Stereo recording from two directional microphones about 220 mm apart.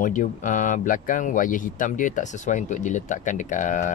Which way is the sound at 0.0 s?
35° left (ahead or behind).